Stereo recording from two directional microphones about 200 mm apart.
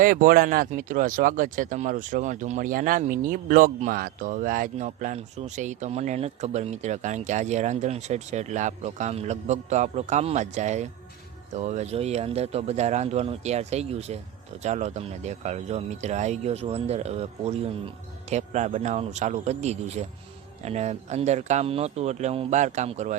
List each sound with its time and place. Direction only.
0.0 s speech: 45° right (ahead or behind)